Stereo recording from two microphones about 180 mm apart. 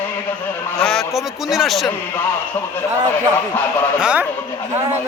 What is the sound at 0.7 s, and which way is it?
A man's voice, 5° left (ahead or behind).